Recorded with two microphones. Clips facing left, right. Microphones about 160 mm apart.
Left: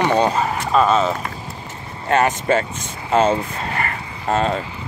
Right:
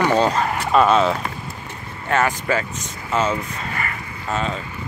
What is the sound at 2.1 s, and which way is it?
Speech, 20° left (ahead or behind).